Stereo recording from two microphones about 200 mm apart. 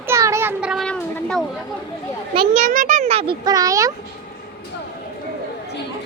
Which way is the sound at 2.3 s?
30° right (ahead or behind).